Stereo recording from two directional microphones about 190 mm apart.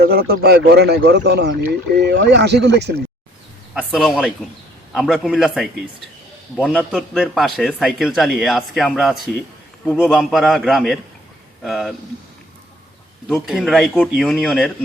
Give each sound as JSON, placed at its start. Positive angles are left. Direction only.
{"t": 0.0, "sound": "speech", "side_deg": -55}
{"t": 3.8, "sound": "speech", "side_deg": 0}
{"t": 6.9, "sound": "speech", "side_deg": 0}
{"t": 13.3, "sound": "speech", "side_deg": 0}